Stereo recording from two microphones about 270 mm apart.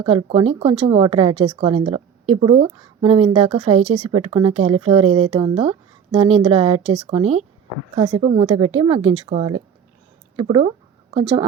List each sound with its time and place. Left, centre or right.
0.0 s speech: centre